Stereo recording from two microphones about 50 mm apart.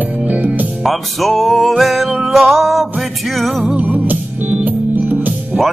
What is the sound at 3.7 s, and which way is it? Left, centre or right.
Music, right.